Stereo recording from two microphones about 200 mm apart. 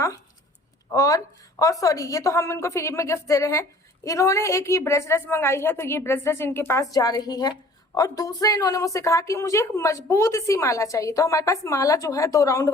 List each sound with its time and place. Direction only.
0.9 s a woman's voice: 15° left (ahead or behind)